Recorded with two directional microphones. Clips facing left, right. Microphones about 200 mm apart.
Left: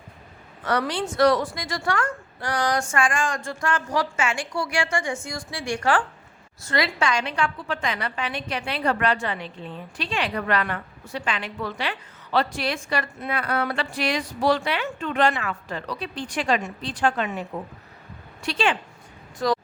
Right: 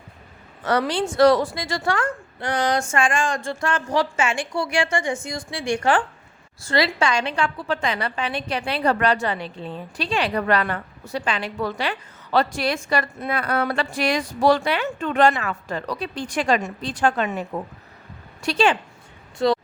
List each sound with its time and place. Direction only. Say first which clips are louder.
0.6 s a woman's voice: right 3 dB; 25° right (ahead or behind); by 17.4 s 45° right (ahead or behind)
18.4 s a woman's voice: right 4 dB; 40° right (ahead or behind)
19.4 s a woman's voice: right 4 dB; 25° right (ahead or behind)